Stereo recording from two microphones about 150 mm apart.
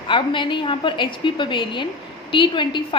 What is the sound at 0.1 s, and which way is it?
A woman's voice, 35° left (ahead or behind).